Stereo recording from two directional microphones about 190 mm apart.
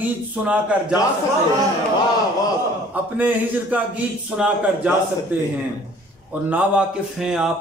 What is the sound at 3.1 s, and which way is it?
A man's voice, 10° right (ahead or behind).